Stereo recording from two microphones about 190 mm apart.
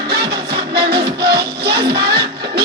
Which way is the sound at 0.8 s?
55° right (ahead or behind).